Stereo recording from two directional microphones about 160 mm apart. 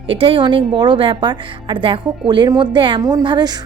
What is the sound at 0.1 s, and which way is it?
A woman's voice, 35° right (ahead or behind).